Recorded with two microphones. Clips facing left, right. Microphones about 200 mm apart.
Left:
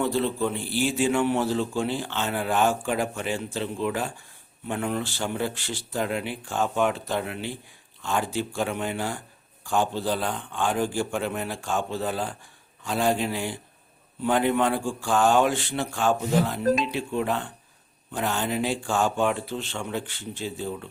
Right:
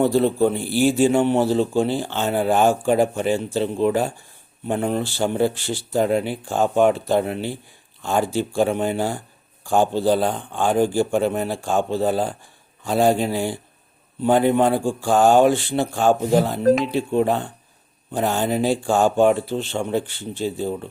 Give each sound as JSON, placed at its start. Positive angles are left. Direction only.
{"t": 0.0, "sound": "a man's voice", "side_deg": -40}
{"t": 15.2, "sound": "mantra", "side_deg": -45}
{"t": 15.4, "sound": "a man's voice", "side_deg": -35}